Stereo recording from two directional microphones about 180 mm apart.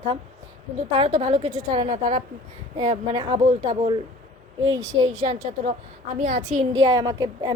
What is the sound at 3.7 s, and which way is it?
Speech, 35° right (ahead or behind).